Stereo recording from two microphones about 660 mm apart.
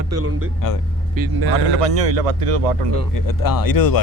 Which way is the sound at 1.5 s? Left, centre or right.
Right.